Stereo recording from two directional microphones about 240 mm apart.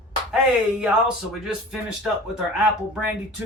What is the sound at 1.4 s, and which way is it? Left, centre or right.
Speech, centre.